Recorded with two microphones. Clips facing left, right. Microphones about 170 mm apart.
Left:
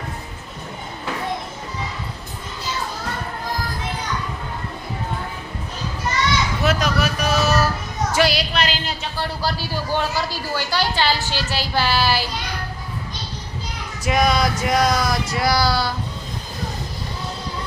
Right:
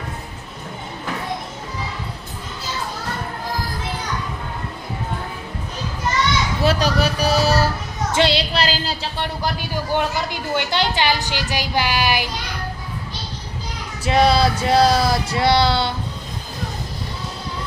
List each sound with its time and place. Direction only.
6.6 s a woman's voice: 30° right (ahead or behind); by 12.3 s 15° right (ahead or behind)
14.0 s a woman's voice: 30° right (ahead or behind)